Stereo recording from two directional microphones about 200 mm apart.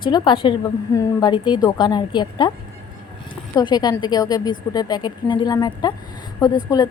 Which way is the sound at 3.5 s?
20° left (ahead or behind).